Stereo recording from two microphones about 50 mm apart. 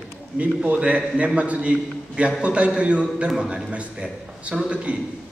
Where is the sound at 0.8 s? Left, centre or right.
Right.